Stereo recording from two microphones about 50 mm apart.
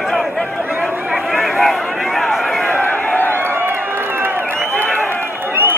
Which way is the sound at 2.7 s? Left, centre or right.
Left.